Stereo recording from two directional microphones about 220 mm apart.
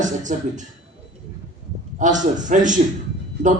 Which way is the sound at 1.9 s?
35° right (ahead or behind).